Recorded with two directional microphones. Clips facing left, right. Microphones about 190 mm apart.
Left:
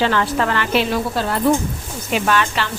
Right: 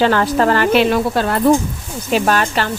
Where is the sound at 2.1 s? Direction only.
40° right (ahead or behind).